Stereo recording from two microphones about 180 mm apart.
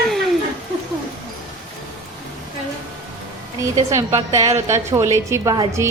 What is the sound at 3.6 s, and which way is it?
A woman's voice, 15° right (ahead or behind).